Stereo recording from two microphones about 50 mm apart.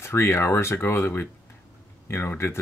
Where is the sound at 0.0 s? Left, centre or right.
Left.